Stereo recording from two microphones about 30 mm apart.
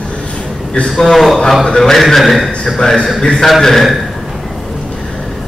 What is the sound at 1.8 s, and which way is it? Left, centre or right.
A man's voice, centre.